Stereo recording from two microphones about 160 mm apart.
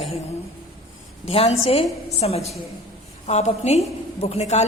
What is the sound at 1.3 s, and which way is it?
A woman's voice, 40° left (ahead or behind).